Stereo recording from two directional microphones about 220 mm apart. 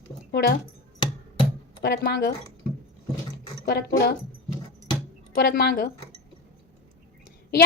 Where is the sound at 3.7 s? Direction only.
45° left (ahead or behind).